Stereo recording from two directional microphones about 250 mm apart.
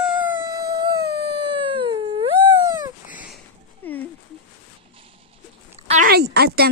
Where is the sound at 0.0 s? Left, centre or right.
Centre.